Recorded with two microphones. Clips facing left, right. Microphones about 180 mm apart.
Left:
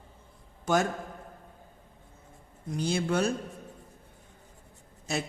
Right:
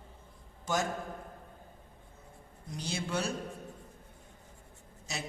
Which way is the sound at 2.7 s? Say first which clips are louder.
Left 7 dB; 55° left (ahead or behind).